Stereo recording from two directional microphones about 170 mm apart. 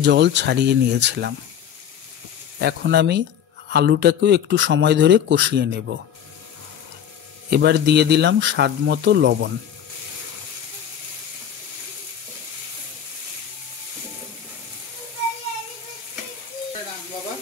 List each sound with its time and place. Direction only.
0.0 s a man's voice: 90° right
2.6 s a man's voice: 85° right
7.4 s speech: 75° right (ahead or behind); by 9.5 s 90° right